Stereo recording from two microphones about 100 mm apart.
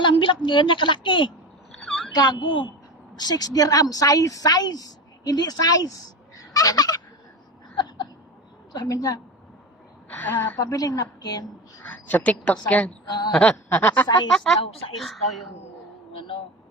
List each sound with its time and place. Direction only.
0.0 s a woman's voice: 55° left (ahead or behind)
3.2 s a woman's voice: 40° left (ahead or behind)
6.3 s a sound: 35° left (ahead or behind)
8.7 s a woman's voice: 40° left (ahead or behind)
10.1 s a woman's voice: 20° left (ahead or behind)
10.6 s a woman's voice: 40° left (ahead or behind)
11.8 s a woman's voice: 15° left (ahead or behind)
13.1 s a woman's voice: 45° left (ahead or behind)
13.3 s a woman's voice: 10° left (ahead or behind)
14.3 s speech: 5° left (ahead or behind)
16.1 s speech: 60° left (ahead or behind)